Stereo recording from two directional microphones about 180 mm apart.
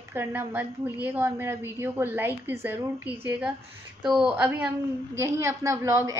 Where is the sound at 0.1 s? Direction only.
15° right (ahead or behind).